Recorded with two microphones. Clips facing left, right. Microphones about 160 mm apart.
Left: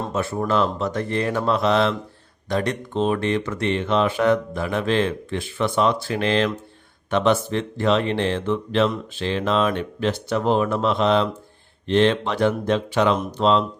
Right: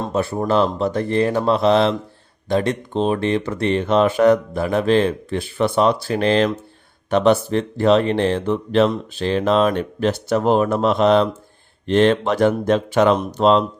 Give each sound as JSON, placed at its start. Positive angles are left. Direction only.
{"t": 0.1, "sound": "speech", "side_deg": -30}